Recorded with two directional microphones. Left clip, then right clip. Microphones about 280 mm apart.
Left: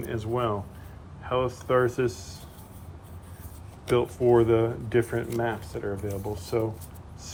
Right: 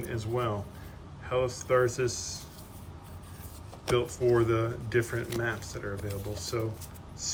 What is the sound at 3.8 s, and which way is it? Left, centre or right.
Speech, centre.